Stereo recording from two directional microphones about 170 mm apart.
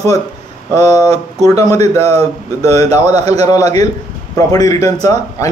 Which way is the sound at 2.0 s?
35° right (ahead or behind).